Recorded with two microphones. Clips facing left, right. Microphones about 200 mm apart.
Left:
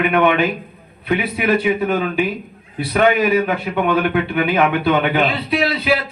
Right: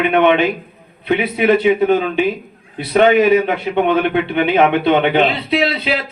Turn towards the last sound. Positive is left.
turn(degrees=-25)  # may be behind; listen again after turning